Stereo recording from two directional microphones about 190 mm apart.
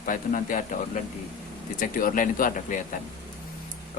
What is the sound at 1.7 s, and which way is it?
Speech, 45° left (ahead or behind).